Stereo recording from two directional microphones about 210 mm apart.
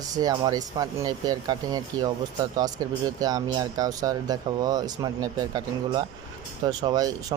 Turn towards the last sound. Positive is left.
turn(degrees=-20)  # may be behind; listen again after turning